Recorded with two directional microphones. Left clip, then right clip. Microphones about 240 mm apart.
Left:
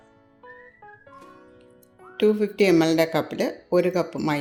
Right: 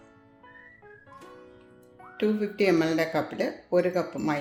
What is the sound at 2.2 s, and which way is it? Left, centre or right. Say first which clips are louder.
Speech: left 6 dB; left.